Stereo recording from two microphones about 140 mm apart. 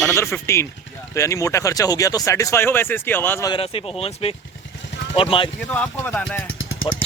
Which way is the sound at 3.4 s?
40° left (ahead or behind).